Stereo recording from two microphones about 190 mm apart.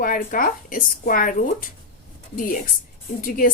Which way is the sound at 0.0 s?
45° left (ahead or behind).